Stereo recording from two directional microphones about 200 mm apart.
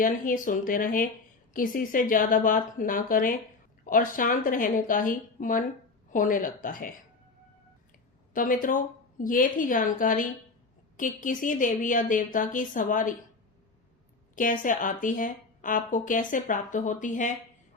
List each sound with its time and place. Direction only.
0.0 s a woman's voice: 40° left (ahead or behind)
8.3 s a woman's voice: 45° left (ahead or behind)
14.3 s a woman's voice: 40° left (ahead or behind)